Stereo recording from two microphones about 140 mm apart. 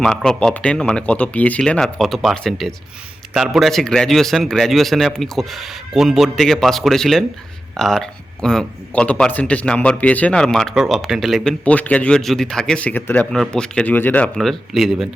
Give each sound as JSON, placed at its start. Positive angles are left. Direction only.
{"t": 0.0, "sound": "a man's voice", "side_deg": 5}
{"t": 11.6, "sound": "a man's voice", "side_deg": 10}